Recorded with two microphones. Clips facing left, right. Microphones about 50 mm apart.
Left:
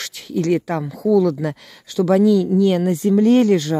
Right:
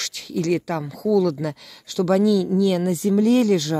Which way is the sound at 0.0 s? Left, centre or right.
Left.